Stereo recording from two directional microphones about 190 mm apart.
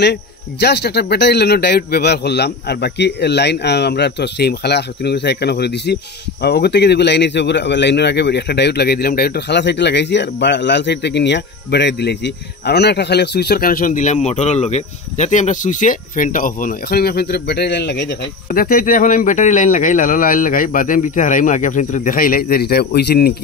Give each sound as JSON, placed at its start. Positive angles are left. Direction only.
{"t": 0.0, "sound": "speech", "side_deg": 60}